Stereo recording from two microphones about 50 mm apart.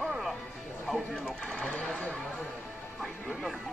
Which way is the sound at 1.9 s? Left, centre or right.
Centre.